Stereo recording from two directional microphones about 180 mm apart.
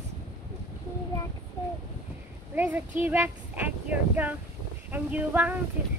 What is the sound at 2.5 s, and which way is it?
Speech, 10° right (ahead or behind).